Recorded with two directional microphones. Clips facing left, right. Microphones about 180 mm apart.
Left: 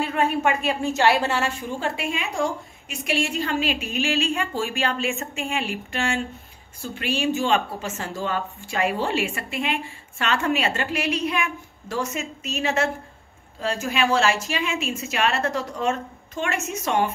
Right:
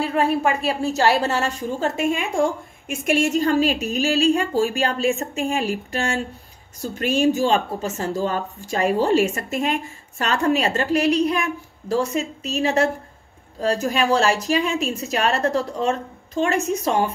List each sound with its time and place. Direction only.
0.0 s a woman's voice: 35° right (ahead or behind)